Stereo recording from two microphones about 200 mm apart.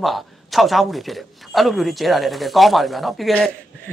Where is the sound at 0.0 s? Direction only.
Centre (ahead or behind).